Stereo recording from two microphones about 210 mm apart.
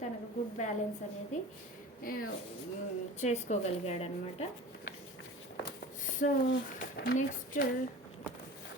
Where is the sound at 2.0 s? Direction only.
45° left (ahead or behind).